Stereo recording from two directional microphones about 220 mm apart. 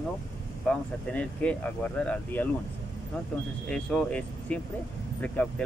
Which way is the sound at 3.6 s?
5° left (ahead or behind).